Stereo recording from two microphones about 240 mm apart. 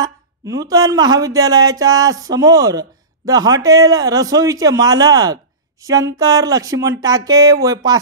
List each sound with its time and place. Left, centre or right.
0.0 s speech: centre